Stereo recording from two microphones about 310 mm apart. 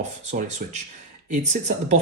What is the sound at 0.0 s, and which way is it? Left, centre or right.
Speech, right.